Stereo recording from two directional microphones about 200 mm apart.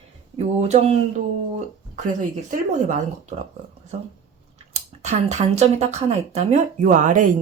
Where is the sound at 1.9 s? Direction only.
40° right (ahead or behind).